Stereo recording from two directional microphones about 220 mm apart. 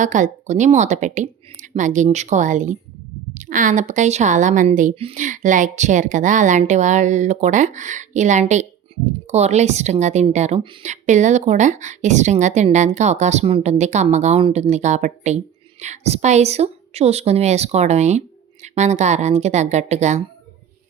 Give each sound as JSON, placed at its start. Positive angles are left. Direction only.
{"t": 0.0, "sound": "a woman's voice", "side_deg": -35}